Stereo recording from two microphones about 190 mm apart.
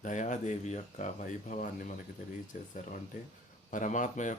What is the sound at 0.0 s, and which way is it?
Speech, 40° left (ahead or behind).